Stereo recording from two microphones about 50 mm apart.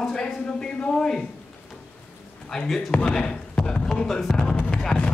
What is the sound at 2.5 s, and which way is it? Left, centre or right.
Speech, centre.